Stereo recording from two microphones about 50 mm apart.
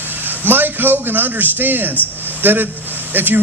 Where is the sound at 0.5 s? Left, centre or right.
Right.